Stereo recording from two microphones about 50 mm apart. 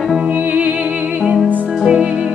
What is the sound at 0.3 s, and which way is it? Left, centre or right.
Music, right.